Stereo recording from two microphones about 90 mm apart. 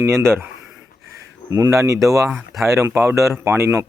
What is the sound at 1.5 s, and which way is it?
Speech, 35° right (ahead or behind).